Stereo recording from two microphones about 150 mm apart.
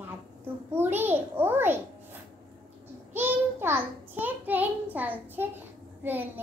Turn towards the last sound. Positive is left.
turn(degrees=-15)  # may be behind; listen again after turning